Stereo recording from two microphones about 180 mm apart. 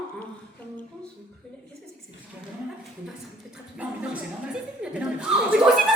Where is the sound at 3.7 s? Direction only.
5° right (ahead or behind).